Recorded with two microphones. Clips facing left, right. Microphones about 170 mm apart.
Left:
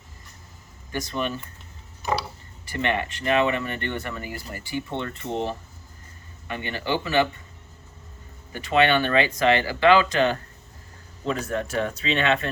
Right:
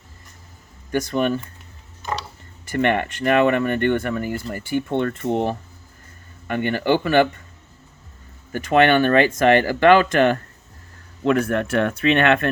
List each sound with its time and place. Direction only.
0.9 s speech: 50° right (ahead or behind)
2.0 s mechanisms: 10° left (ahead or behind)
2.6 s speech: 55° right (ahead or behind)
8.5 s speech: 50° right (ahead or behind)